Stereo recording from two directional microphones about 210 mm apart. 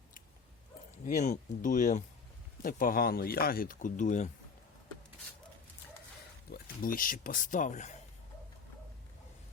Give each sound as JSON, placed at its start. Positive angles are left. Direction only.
{"t": 1.0, "sound": "speech", "side_deg": 35}
{"t": 6.5, "sound": "speech", "side_deg": 40}